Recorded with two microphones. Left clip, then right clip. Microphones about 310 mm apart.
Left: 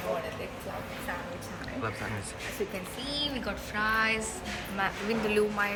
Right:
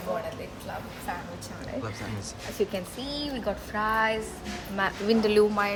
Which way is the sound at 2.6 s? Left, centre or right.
Right.